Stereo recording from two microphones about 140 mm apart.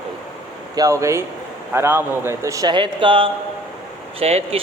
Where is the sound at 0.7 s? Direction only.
25° right (ahead or behind).